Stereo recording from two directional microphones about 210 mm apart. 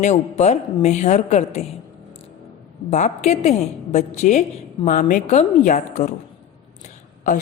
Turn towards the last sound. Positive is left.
turn(degrees=40)  # may be behind; listen again after turning